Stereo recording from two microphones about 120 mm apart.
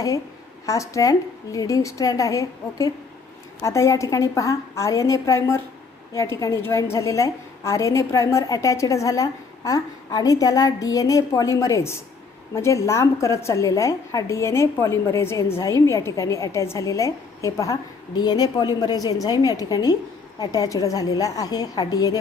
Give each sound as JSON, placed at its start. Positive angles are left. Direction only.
{"t": 0.6, "sound": "a woman's voice", "side_deg": 25}